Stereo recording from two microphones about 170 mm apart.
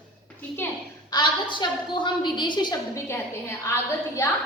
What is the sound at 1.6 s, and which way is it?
A woman's voice, 25° left (ahead or behind).